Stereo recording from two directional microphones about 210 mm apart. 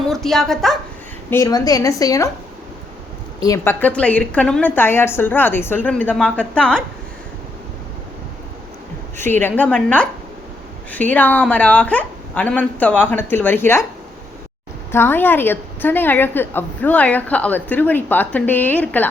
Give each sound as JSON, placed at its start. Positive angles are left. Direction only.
{"t": 0.1, "sound": "a woman's voice", "side_deg": 0}
{"t": 1.3, "sound": "a woman's voice", "side_deg": 15}
{"t": 3.4, "sound": "a woman's voice", "side_deg": 15}
{"t": 9.1, "sound": "a woman's voice", "side_deg": 10}
{"t": 14.9, "sound": "a woman's voice", "side_deg": 10}